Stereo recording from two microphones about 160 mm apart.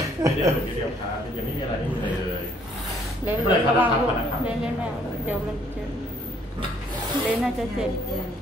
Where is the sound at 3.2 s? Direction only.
10° right (ahead or behind).